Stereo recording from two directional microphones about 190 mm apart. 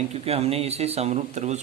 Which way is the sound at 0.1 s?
30° right (ahead or behind).